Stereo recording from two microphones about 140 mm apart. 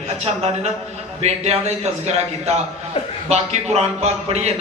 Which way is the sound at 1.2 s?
50° right (ahead or behind).